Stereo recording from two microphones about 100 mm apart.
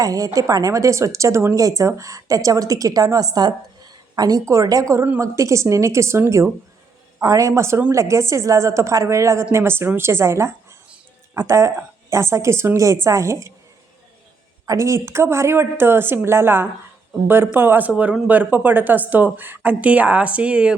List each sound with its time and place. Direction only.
0.0 s a woman's voice: 35° right (ahead or behind)
14.7 s a woman's voice: 30° right (ahead or behind); by 20.7 s 10° right (ahead or behind)